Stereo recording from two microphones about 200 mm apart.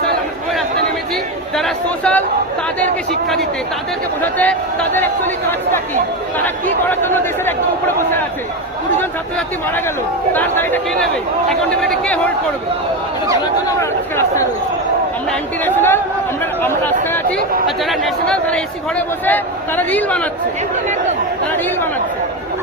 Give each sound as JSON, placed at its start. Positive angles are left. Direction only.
{"t": 1.5, "sound": "a sound", "side_deg": 0}
{"t": 4.2, "sound": "a man's voice", "side_deg": 10}
{"t": 10.3, "sound": "a man's voice", "side_deg": 10}
{"t": 13.7, "sound": "a man's voice", "side_deg": 15}
{"t": 17.3, "sound": "speech", "side_deg": -45}
{"t": 17.7, "sound": "a man's voice", "side_deg": 0}